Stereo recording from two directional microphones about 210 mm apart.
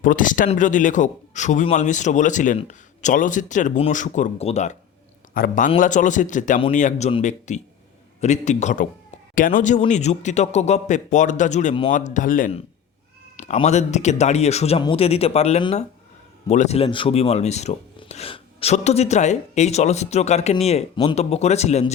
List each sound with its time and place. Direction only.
0.0 s speech: 40° left (ahead or behind)